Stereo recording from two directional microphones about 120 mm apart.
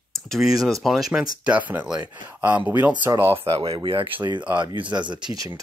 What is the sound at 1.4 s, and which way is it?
Speech, 10° right (ahead or behind).